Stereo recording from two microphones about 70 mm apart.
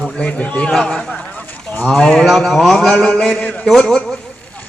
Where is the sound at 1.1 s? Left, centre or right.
Centre.